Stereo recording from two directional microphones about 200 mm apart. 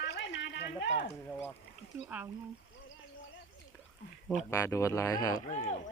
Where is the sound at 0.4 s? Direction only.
60° left (ahead or behind).